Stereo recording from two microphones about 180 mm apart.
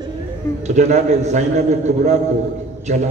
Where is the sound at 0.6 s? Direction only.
40° right (ahead or behind).